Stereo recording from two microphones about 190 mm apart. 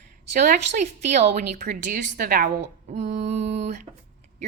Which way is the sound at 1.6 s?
50° right (ahead or behind).